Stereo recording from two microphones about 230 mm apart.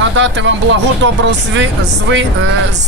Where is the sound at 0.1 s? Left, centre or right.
Right.